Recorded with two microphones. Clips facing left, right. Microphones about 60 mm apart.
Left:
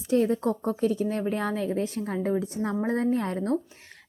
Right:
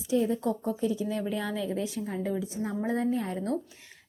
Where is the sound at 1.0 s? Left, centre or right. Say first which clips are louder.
Left 4 dB; left.